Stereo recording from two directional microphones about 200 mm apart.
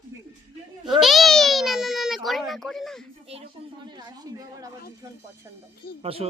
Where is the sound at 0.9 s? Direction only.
Centre (ahead or behind).